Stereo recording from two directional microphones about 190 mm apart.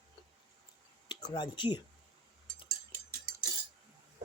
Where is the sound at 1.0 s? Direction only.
25° left (ahead or behind).